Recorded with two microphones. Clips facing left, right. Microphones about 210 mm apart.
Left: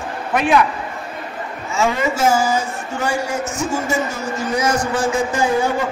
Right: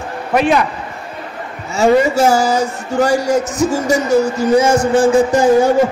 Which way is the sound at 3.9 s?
90° right.